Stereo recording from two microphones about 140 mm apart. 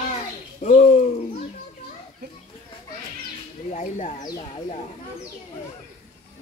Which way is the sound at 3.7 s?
60° left (ahead or behind).